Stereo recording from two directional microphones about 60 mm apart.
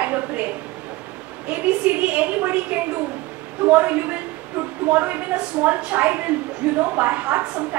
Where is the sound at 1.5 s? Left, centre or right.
Right.